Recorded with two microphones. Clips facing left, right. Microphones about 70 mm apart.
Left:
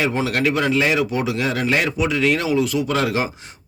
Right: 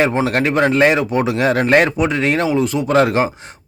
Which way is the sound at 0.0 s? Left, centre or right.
Right.